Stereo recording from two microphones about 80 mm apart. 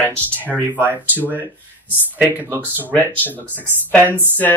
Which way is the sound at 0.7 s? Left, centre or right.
Right.